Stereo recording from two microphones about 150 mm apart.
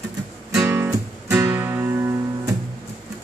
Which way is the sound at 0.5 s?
15° right (ahead or behind).